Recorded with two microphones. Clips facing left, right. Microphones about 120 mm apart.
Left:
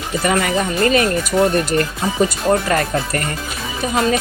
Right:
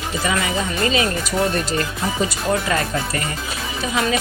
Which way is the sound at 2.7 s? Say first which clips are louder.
Left 3 dB; 50° left (ahead or behind).